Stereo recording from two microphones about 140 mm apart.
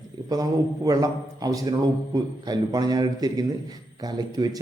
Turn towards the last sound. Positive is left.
turn(degrees=-25)  # may be behind; listen again after turning